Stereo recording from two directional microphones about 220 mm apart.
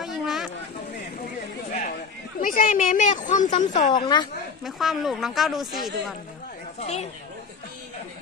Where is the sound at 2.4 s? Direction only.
40° left (ahead or behind).